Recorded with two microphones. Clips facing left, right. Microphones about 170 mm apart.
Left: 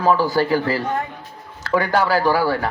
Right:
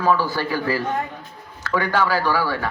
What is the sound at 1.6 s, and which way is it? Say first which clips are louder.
A man's voice: left 3 dB; 40° left (ahead or behind).